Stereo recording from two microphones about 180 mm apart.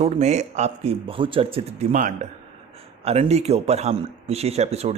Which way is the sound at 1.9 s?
45° right (ahead or behind).